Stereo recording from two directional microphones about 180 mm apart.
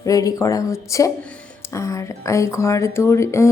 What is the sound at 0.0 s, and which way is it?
Speech, 20° left (ahead or behind).